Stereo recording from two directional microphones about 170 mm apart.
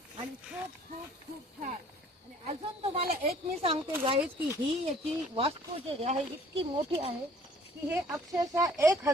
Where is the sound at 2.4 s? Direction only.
35° right (ahead or behind).